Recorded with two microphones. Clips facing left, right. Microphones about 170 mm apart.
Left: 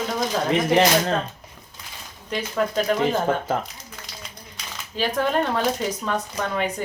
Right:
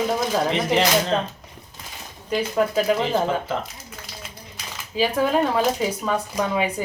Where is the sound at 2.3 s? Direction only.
5° right (ahead or behind).